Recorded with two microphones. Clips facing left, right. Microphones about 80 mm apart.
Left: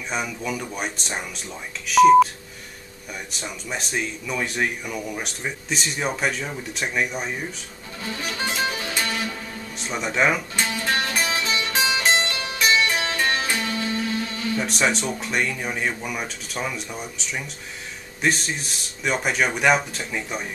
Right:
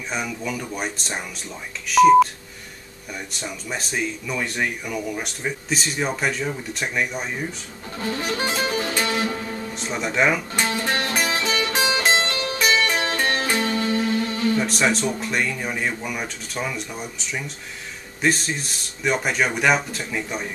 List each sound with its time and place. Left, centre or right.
0.1 s speech: centre
3.3 s speech: centre
8.0 s music: right
8.3 s music: right
9.8 s speech: centre
10.7 s music: right
11.1 s music: right
14.6 s speech: centre